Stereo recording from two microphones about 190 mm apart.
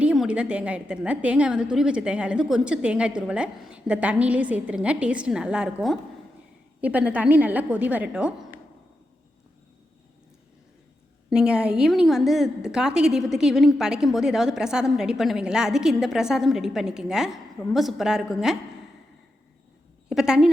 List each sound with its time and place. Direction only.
0.0 s a woman's voice: 5° right (ahead or behind)
11.3 s a woman's voice: 5° right (ahead or behind)
20.1 s a woman's voice: 5° right (ahead or behind)